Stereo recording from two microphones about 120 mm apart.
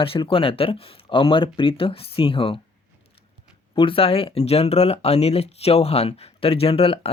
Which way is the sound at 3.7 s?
45° left (ahead or behind).